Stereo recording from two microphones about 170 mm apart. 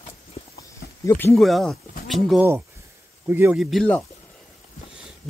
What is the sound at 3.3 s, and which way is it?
Speech, 10° right (ahead or behind).